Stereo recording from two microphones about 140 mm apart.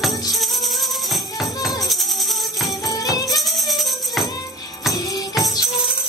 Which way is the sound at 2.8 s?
25° left (ahead or behind).